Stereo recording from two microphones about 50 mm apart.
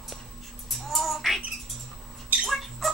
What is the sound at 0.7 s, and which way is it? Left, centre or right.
Music, centre.